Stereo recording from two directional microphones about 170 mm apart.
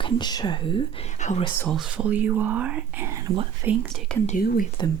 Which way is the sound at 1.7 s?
5° right (ahead or behind).